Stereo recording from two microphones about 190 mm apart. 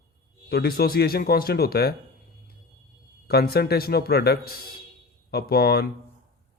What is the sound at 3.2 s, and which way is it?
Speech, 55° left (ahead or behind).